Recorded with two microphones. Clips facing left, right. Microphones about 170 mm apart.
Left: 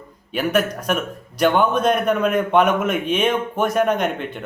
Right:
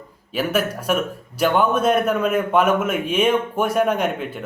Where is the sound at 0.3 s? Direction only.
5° right (ahead or behind).